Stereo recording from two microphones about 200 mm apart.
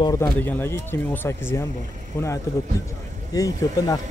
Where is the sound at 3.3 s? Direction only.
20° left (ahead or behind).